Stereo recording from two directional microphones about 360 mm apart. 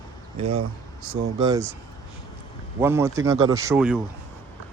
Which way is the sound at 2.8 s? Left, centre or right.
Centre.